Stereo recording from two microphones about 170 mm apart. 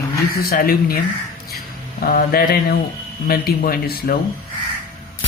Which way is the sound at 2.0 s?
60° left (ahead or behind).